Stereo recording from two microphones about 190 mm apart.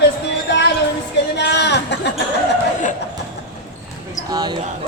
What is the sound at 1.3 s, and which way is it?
Speech, 65° left (ahead or behind).